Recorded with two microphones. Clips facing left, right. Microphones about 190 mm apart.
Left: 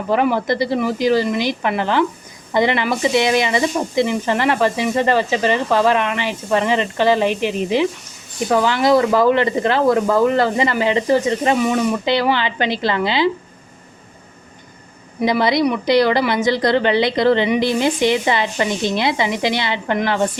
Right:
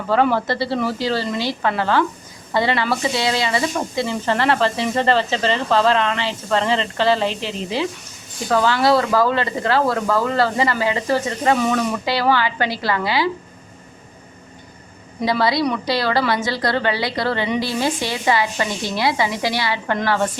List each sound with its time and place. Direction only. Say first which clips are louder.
0.1 s speech: left 1 dB; 15° left (ahead or behind)
15.2 s speech: left 3 dB; 20° left (ahead or behind)